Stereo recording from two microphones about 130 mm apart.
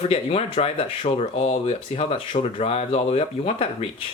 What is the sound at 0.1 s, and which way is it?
Speech, 50° left (ahead or behind).